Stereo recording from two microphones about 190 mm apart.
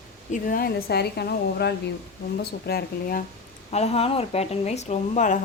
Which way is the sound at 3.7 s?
35° left (ahead or behind).